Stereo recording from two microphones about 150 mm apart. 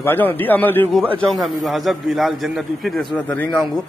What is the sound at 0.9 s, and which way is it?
A man's voice, centre (ahead or behind).